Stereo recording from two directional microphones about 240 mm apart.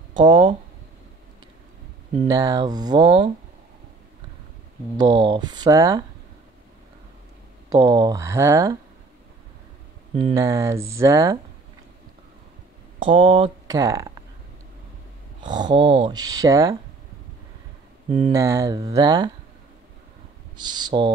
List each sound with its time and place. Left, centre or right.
0.1 s speech: centre
2.2 s speech: centre
4.9 s speech: centre
7.7 s speech: centre
10.1 s speech: centre
13.0 s speech: right
15.4 s speech: centre
18.3 s speech: centre
20.5 s speech: centre